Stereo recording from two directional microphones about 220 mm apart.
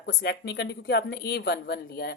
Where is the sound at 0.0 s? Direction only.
50° left (ahead or behind).